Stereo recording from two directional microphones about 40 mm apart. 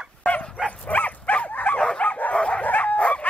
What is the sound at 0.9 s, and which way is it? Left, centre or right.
Dog, left.